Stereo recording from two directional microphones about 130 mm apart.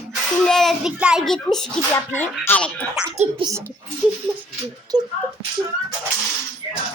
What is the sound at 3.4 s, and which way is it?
Music, 25° right (ahead or behind).